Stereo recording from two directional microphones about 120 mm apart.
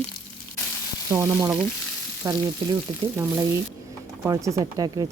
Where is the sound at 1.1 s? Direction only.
20° right (ahead or behind).